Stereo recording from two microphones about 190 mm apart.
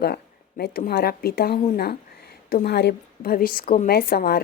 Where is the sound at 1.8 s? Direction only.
55° left (ahead or behind).